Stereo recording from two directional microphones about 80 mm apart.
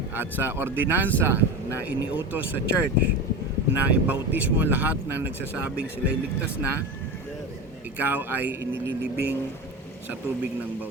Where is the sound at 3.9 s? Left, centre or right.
Right.